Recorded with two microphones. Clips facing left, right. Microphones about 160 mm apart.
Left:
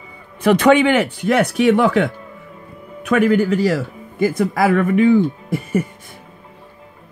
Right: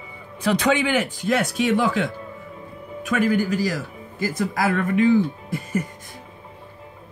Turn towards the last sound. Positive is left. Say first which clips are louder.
# left 6 dB
turn(degrees=55)  # may be behind; listen again after turning